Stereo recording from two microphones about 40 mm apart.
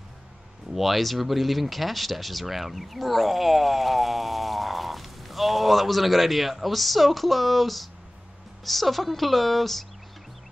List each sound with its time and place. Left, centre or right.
0.7 s speech: centre